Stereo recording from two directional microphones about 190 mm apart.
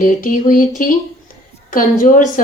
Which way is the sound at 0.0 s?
40° left (ahead or behind).